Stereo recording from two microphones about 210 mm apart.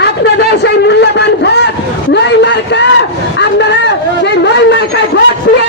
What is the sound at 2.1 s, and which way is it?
Vehicle, 55° left (ahead or behind).